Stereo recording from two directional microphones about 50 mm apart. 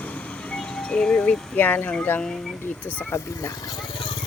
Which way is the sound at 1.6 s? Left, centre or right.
Left.